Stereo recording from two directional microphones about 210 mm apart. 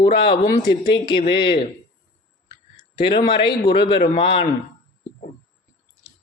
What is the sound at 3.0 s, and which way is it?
Speech, 25° left (ahead or behind).